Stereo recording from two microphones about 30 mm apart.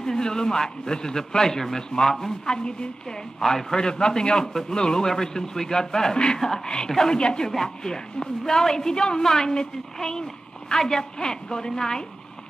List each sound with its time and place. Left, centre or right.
0.0 s a woman's voice: left
2.4 s a woman's voice: left
6.1 s speech: left
6.4 s a woman's voice: left